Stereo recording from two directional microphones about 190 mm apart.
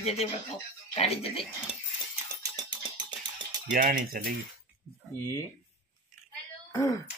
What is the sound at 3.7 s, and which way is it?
Speech, 50° right (ahead or behind).